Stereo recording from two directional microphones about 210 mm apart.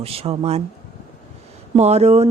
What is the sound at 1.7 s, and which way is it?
Speech, 30° right (ahead or behind).